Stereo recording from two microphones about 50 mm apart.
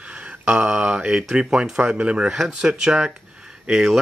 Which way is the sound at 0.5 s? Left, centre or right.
Centre.